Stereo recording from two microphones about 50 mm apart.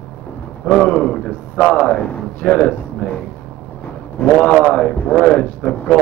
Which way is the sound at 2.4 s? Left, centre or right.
Left.